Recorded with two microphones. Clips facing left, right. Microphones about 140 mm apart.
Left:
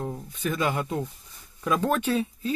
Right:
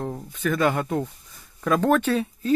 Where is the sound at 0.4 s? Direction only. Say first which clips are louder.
Right 5 dB; 50° right (ahead or behind).